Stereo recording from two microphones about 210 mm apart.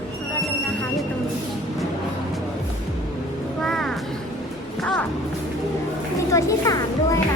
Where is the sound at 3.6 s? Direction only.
Centre (ahead or behind).